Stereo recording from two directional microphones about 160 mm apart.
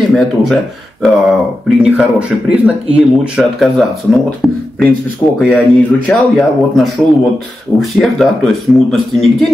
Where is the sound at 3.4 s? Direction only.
Centre (ahead or behind).